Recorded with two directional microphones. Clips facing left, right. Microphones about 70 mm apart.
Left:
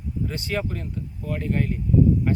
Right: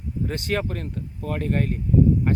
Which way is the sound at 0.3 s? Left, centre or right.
Right.